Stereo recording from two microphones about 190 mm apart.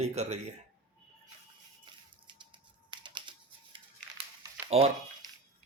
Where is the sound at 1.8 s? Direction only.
25° right (ahead or behind).